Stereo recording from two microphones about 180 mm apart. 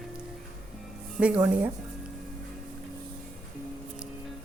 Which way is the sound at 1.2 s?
5° right (ahead or behind).